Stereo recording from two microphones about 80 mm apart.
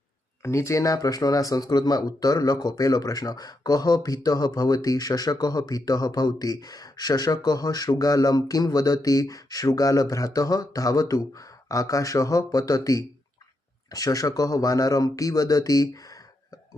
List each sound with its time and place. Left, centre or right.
0.4 s speech: left